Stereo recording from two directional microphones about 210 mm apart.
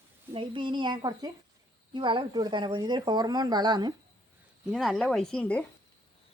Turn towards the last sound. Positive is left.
turn(degrees=5)  # may be behind; listen again after turning